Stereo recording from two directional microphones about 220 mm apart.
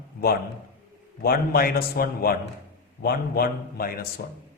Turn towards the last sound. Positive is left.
turn(degrees=45)  # may be behind; listen again after turning